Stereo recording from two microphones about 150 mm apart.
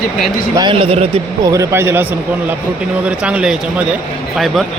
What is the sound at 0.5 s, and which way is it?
Speech, 30° right (ahead or behind).